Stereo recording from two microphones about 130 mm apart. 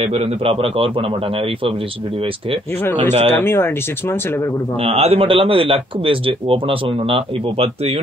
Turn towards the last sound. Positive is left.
turn(degrees=-50)  # may be behind; listen again after turning